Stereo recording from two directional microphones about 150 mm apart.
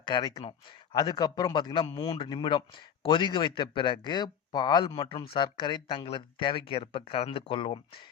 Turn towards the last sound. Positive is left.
turn(degrees=35)  # may be behind; listen again after turning